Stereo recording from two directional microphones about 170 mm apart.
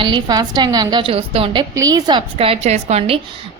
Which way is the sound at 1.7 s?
20° right (ahead or behind).